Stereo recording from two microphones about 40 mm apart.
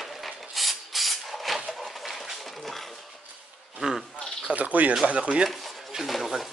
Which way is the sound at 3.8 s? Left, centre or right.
Right.